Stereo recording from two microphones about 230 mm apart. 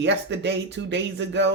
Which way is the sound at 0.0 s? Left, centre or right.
Right.